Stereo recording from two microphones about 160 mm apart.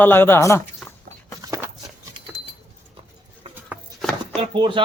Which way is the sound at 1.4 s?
20° right (ahead or behind).